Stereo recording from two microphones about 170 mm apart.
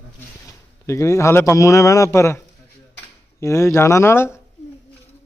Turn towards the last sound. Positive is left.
turn(degrees=15)  # may be behind; listen again after turning